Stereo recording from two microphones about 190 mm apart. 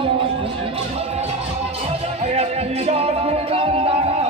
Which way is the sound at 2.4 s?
35° right (ahead or behind).